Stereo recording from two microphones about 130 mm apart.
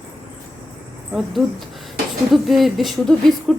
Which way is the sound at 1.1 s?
Centre (ahead or behind).